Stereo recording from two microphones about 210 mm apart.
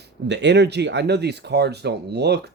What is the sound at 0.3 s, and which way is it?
Speech, 55° right (ahead or behind).